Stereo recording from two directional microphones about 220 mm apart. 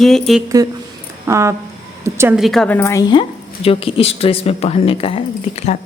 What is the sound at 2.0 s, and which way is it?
Speech, 10° right (ahead or behind).